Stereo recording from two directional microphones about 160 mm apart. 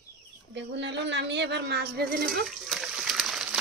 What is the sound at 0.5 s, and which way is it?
Speech, 90° right.